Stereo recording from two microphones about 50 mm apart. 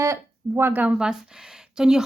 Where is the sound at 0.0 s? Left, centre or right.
Right.